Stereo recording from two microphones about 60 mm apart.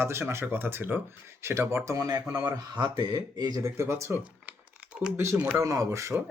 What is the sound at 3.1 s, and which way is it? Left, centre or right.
Speech, right.